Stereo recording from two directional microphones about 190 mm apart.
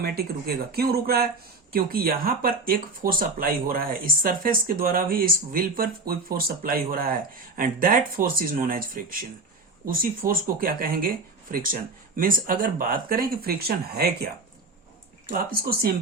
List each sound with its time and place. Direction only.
0.0 s speech: 55° right (ahead or behind)
15.3 s speech: 50° right (ahead or behind)